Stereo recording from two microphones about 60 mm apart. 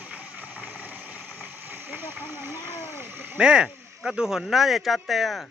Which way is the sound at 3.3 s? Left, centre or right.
Centre.